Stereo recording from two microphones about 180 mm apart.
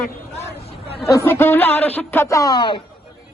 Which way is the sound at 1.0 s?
15° left (ahead or behind).